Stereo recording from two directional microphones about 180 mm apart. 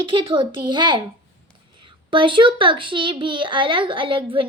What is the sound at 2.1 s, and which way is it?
A woman's voice, 25° right (ahead or behind).